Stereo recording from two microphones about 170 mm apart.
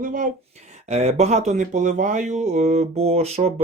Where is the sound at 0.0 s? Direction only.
50° right (ahead or behind).